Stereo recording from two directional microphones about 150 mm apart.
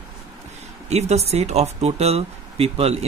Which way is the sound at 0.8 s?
45° right (ahead or behind).